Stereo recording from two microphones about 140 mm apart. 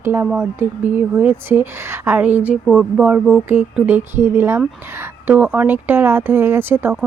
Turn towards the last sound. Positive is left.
turn(degrees=-15)  # may be behind; listen again after turning